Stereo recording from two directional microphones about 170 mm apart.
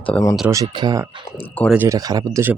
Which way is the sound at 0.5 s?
20° right (ahead or behind).